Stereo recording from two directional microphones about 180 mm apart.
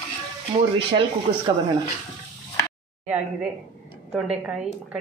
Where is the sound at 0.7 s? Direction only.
30° right (ahead or behind).